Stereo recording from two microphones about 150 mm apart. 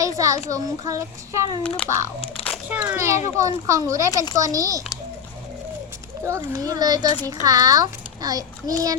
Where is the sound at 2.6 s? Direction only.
10° right (ahead or behind).